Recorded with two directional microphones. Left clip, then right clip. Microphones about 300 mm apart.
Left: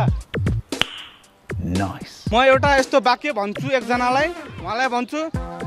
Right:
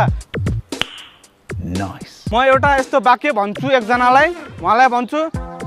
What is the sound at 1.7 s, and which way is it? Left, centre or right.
Speech, centre.